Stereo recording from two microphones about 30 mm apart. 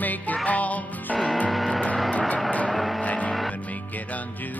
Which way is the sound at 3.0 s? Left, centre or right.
Left.